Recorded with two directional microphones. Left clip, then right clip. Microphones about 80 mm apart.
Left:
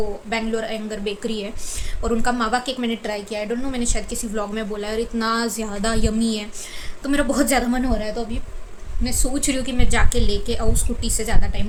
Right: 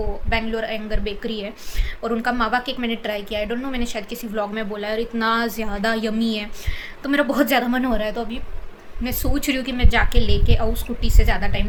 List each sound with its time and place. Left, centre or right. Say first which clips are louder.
0.3 s a woman's voice: right 2 dB; left
1.2 s a woman's voice: left 1 dB; left
2.0 s a woman's voice: even; left
3.0 s speech: right 1 dB; centre
3.7 s a woman's voice: left 1 dB; left
7.9 s speech: right 2 dB; centre
9.3 s a woman's voice: right 2 dB; left